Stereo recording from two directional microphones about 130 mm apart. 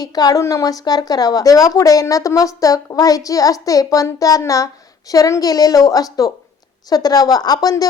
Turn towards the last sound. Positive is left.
turn(degrees=30)  # may be behind; listen again after turning